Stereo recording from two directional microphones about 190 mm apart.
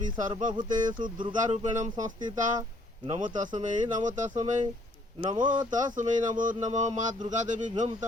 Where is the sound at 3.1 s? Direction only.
40° right (ahead or behind).